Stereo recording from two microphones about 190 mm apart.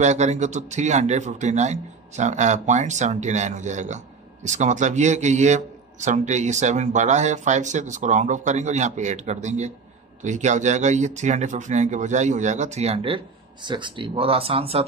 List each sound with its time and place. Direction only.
0.0 s speech: 35° right (ahead or behind)